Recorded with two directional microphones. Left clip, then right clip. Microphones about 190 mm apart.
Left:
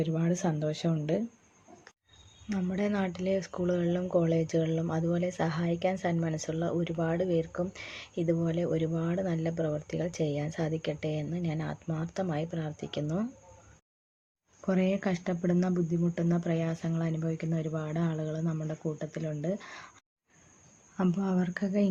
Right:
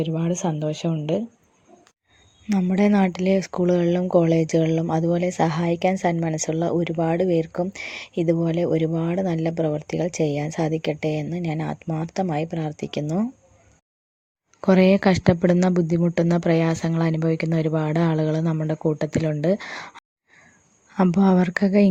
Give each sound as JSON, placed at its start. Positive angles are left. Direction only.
{"t": 0.0, "sound": "speech", "side_deg": -25}
{"t": 2.5, "sound": "speech", "side_deg": -30}
{"t": 14.6, "sound": "speech", "side_deg": -45}